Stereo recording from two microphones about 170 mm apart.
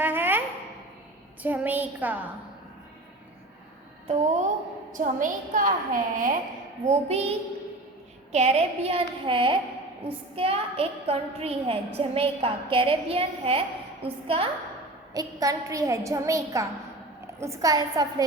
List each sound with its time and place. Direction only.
0.0 s a sound: 10° right (ahead or behind)
1.4 s a woman's voice: 10° right (ahead or behind)
4.1 s a woman's voice: 45° right (ahead or behind)
6.8 s a woman's voice: 40° right (ahead or behind)
15.1 s a woman's voice: 20° right (ahead or behind)